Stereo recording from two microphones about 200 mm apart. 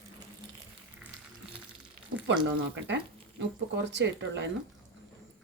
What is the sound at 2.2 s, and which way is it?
Speech, 65° right (ahead or behind).